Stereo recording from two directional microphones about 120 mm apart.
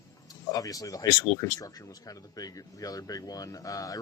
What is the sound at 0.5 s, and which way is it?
Speech, 30° left (ahead or behind).